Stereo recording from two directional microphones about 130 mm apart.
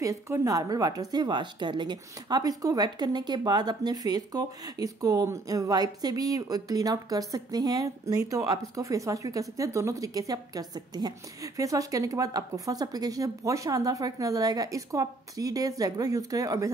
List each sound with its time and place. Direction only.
0.0 s a woman's voice: 25° right (ahead or behind)